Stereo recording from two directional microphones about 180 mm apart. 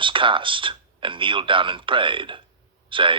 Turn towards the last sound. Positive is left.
turn(degrees=-25)  # may be behind; listen again after turning